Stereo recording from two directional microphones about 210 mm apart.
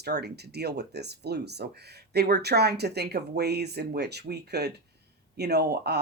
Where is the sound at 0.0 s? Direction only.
50° right (ahead or behind).